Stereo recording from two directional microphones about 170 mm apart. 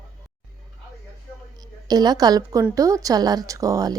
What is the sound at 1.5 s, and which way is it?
A woman's voice, 25° right (ahead or behind).